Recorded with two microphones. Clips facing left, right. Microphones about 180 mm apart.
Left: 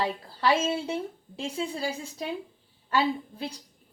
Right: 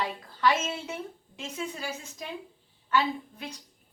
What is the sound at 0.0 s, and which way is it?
A woman's voice, 30° left (ahead or behind).